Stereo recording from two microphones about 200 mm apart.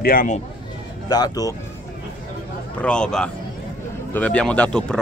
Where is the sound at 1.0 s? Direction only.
20° left (ahead or behind).